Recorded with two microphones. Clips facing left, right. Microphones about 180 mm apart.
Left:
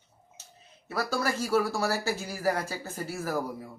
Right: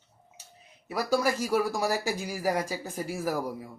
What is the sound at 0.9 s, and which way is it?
Speech, 15° right (ahead or behind).